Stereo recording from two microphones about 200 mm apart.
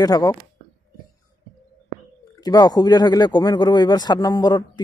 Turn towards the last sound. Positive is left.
turn(degrees=20)  # may be behind; listen again after turning